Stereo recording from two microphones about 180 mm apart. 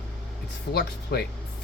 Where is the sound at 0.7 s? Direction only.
60° left (ahead or behind).